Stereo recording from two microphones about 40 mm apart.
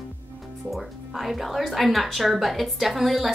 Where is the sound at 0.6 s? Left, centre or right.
Centre.